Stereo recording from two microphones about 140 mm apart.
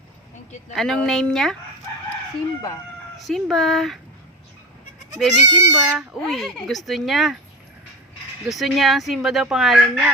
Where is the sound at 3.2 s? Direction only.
Centre (ahead or behind).